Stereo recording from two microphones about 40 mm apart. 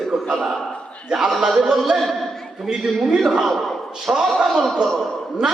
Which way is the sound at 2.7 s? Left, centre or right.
Centre.